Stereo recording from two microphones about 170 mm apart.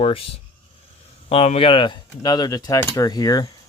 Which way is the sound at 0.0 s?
35° left (ahead or behind).